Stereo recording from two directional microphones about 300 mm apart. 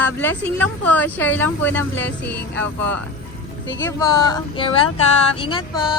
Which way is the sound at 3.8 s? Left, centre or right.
Centre.